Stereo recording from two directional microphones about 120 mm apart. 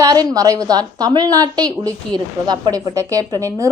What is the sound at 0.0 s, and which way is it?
A woman's voice, 30° right (ahead or behind).